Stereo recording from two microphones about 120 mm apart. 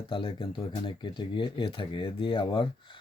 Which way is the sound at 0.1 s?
40° left (ahead or behind).